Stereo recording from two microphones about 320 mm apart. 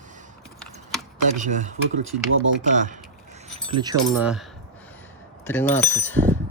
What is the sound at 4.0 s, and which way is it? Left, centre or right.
Speech, centre.